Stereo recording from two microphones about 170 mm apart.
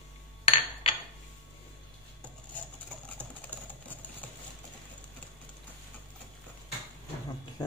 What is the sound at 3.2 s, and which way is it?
Typing, 10° left (ahead or behind).